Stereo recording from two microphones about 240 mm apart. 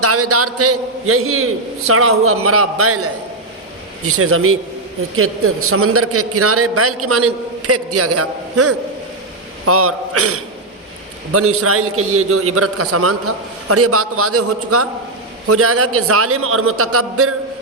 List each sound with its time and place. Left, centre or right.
0.0 s a man's voice: right